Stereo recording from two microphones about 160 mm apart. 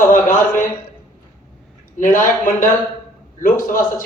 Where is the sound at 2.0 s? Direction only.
50° left (ahead or behind).